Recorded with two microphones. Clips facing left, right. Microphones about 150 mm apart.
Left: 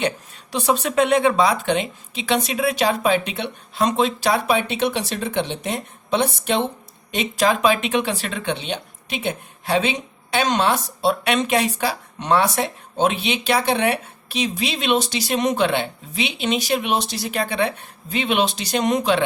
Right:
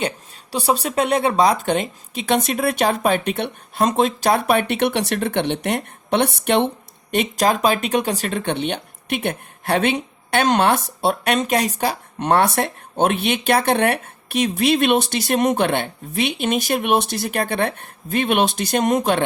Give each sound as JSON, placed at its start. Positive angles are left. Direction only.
{"t": 0.5, "sound": "speech", "side_deg": -35}
{"t": 7.1, "sound": "speech", "side_deg": -50}